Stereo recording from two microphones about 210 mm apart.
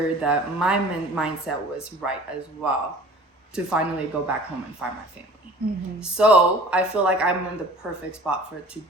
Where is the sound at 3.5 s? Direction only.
5° right (ahead or behind).